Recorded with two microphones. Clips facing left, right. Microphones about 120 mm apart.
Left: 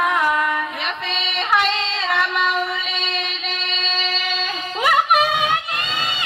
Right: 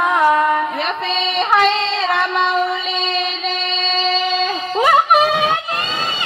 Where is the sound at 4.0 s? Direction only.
30° right (ahead or behind).